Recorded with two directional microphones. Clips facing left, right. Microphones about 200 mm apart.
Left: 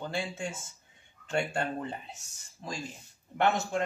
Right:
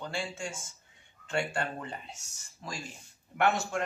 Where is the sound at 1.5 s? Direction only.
20° left (ahead or behind).